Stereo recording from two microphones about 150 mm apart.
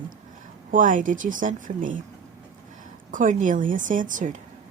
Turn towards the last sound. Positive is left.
turn(degrees=-60)  # may be behind; listen again after turning